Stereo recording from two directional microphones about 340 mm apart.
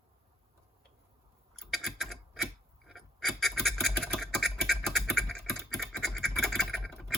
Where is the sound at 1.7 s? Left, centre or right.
Centre.